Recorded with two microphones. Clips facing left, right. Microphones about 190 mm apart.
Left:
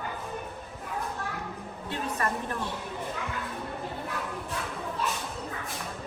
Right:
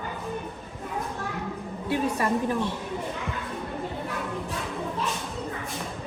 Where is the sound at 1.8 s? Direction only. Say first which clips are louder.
Right 6 dB; 10° right (ahead or behind).